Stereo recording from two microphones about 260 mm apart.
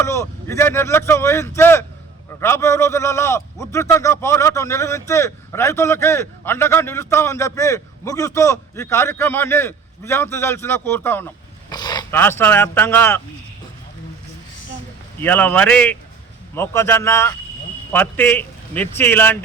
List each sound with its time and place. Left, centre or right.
0.0 s a man's voice: centre
15.2 s a man's voice: centre